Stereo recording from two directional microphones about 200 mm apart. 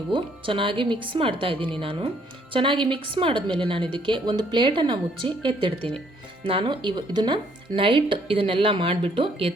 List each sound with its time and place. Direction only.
0.1 s speech: 25° right (ahead or behind)